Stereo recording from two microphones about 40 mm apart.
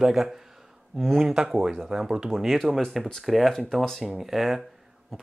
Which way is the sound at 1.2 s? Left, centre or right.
Centre.